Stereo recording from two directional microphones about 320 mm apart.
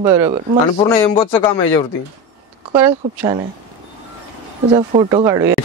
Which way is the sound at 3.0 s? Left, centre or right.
Right.